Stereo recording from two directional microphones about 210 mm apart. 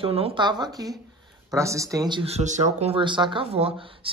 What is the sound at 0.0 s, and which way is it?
Speech, 25° right (ahead or behind).